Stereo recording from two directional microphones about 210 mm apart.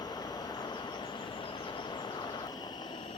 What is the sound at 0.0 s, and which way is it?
Train, 20° left (ahead or behind).